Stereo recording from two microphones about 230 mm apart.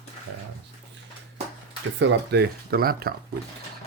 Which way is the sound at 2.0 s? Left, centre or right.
Right.